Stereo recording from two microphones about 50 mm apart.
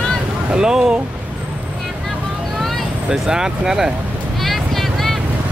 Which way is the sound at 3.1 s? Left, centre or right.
Centre.